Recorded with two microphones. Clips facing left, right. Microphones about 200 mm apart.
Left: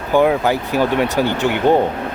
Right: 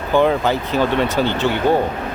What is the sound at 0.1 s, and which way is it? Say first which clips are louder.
Speech: left 1 dB; 10° left (ahead or behind).